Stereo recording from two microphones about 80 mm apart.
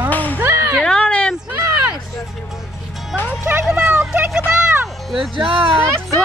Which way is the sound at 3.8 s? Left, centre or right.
Centre.